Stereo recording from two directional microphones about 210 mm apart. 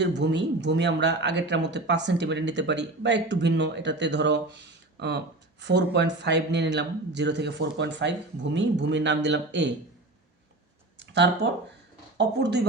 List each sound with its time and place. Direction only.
0.0 s speech: 55° right (ahead or behind)
11.4 s speech: 60° right (ahead or behind)